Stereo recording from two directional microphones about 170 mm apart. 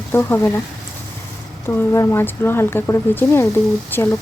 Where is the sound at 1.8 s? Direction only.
15° left (ahead or behind).